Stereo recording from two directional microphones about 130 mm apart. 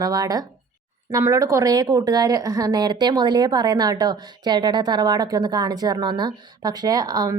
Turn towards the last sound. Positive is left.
turn(degrees=-30)  # may be behind; listen again after turning